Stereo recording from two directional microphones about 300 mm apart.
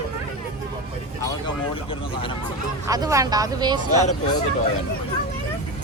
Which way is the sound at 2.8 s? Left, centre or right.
Centre.